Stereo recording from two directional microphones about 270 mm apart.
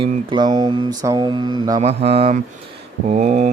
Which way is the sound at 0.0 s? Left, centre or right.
Centre.